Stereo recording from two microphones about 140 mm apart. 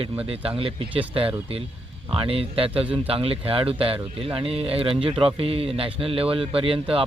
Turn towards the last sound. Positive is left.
turn(degrees=-40)  # may be behind; listen again after turning